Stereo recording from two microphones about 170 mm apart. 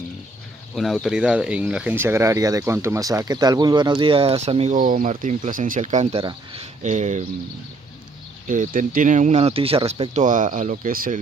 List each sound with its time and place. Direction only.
0.7 s speech: centre (ahead or behind); by 4.7 s 40° right (ahead or behind)
4.7 s speech: 55° right (ahead or behind)
8.5 s speech: 50° right (ahead or behind); by 10.1 s 30° right (ahead or behind)
10.1 s speech: 50° right (ahead or behind)